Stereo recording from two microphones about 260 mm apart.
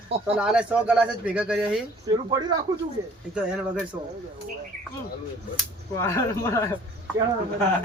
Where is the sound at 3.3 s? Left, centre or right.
Centre.